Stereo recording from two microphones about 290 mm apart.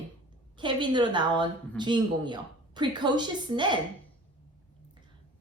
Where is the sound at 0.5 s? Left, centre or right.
Centre.